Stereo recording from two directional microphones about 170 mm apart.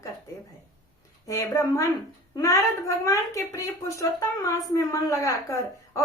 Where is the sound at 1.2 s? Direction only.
20° left (ahead or behind).